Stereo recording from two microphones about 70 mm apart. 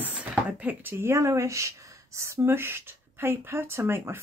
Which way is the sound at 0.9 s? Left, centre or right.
Right.